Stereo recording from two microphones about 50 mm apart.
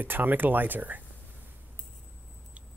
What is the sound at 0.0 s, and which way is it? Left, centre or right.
Speech, right.